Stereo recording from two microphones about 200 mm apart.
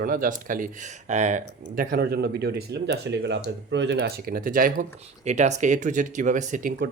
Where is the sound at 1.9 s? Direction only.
50° right (ahead or behind).